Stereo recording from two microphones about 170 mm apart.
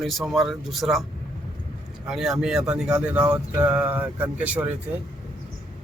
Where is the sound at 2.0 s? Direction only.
Centre (ahead or behind).